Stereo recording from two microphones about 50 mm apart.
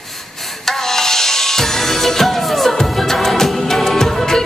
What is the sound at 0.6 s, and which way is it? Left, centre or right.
Music, centre.